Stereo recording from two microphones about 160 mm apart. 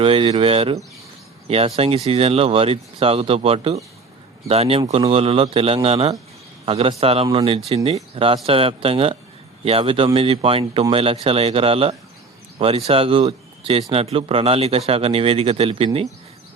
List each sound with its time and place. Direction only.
0.0 s speech: 35° right (ahead or behind)